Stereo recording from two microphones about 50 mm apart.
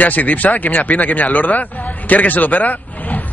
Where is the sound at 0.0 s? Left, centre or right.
Left.